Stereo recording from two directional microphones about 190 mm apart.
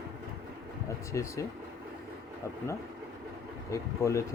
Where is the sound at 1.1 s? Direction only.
15° left (ahead or behind).